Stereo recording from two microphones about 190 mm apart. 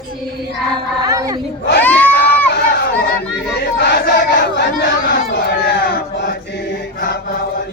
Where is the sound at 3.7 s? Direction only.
55° left (ahead or behind).